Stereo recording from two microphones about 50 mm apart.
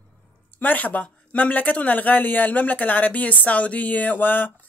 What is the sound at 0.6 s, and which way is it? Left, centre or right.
Speech, left.